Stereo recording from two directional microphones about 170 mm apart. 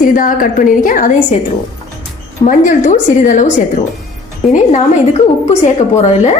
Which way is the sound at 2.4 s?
50° left (ahead or behind).